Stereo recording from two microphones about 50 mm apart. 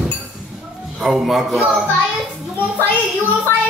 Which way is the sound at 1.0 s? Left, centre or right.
Centre.